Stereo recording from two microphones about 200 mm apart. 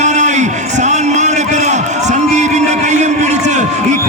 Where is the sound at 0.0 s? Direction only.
35° right (ahead or behind).